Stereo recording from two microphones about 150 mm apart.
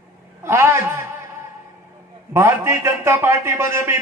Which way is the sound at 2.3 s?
20° right (ahead or behind).